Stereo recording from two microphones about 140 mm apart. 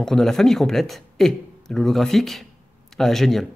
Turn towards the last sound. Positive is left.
turn(degrees=0)  # may be behind; listen again after turning